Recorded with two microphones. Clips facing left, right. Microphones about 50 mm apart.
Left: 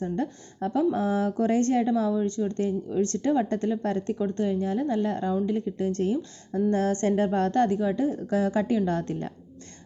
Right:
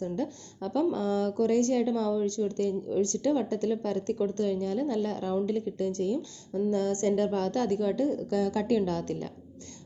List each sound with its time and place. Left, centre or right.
0.0 s speech: left
5.9 s a woman's voice: left